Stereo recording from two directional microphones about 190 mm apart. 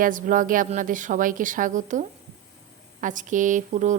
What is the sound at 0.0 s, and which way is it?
A woman's voice, 45° right (ahead or behind).